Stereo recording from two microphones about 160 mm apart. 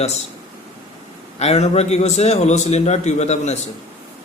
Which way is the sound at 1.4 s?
40° left (ahead or behind).